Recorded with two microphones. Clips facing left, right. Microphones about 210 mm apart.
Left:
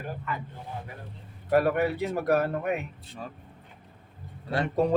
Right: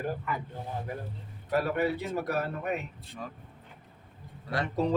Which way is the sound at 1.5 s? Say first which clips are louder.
Left 4 dB; 60° left (ahead or behind).